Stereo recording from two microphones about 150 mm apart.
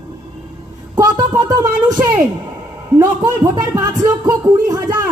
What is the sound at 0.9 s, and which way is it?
Speech, 25° right (ahead or behind).